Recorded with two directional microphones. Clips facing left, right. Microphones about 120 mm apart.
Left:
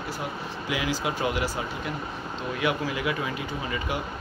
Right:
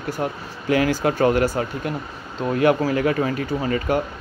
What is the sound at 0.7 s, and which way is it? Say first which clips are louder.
Speech: right 10 dB; 50° right (ahead or behind).